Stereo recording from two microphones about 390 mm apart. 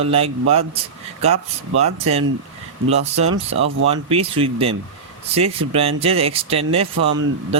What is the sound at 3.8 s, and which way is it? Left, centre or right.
Speech, centre.